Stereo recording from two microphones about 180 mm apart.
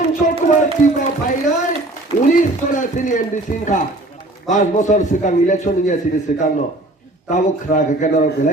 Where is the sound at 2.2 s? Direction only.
45° left (ahead or behind).